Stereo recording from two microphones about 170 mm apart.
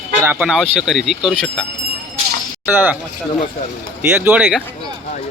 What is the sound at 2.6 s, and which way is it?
Speech, 10° right (ahead or behind).